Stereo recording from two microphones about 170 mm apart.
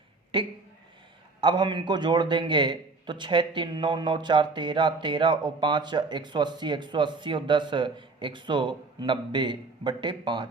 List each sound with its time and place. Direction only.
0.3 s a man's voice: 30° right (ahead or behind)